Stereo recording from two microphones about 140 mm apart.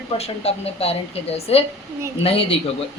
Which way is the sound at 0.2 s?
45° left (ahead or behind).